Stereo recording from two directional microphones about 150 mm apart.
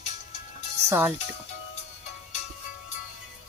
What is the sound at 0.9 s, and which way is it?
Speech, 10° right (ahead or behind).